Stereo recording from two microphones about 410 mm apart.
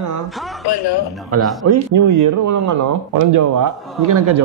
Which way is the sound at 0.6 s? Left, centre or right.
Left.